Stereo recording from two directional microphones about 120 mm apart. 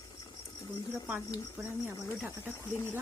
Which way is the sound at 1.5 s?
20° right (ahead or behind).